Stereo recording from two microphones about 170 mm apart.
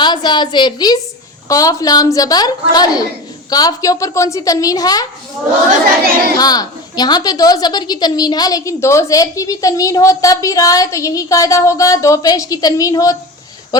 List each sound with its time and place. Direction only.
0.0 s a woman's voice: 25° left (ahead or behind)
6.4 s a woman's voice: 25° left (ahead or behind)